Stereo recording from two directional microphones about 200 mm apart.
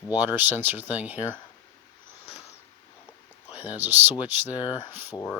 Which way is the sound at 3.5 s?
25° left (ahead or behind).